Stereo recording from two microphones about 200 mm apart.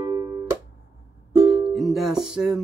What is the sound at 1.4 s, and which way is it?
Music, centre (ahead or behind).